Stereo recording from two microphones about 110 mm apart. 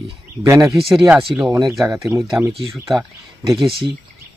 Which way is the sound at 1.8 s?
20° right (ahead or behind).